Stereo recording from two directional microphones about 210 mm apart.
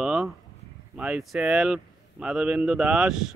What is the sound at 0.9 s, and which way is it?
Speech, 5° right (ahead or behind).